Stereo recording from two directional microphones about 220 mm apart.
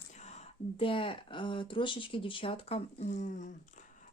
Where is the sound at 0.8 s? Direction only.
25° left (ahead or behind).